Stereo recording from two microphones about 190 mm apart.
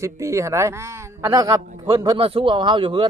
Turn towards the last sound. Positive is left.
turn(degrees=-25)  # may be behind; listen again after turning